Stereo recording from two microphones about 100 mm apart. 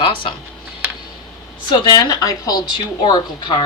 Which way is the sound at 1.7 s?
40° left (ahead or behind).